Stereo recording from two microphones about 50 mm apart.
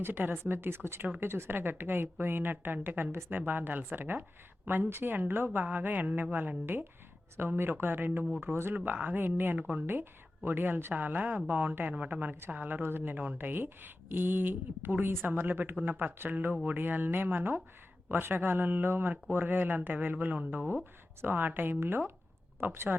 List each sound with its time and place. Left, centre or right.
0.0 s a woman's voice: right
7.3 s a woman's voice: right
9.6 s speech: right
9.8 s a woman's voice: right
22.9 s speech: centre